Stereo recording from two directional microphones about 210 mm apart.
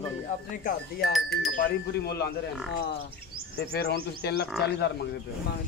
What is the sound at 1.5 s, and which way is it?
Speech, 50° left (ahead or behind).